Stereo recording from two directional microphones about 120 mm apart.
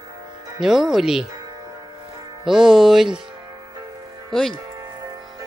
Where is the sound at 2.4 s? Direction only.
Centre (ahead or behind).